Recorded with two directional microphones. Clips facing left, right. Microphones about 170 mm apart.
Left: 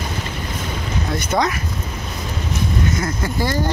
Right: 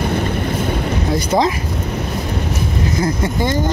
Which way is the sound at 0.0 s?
60° right (ahead or behind).